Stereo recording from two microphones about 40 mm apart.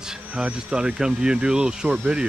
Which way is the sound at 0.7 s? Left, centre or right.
Right.